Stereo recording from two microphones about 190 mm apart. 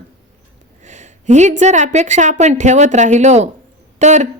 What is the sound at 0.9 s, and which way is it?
Speech, 40° right (ahead or behind).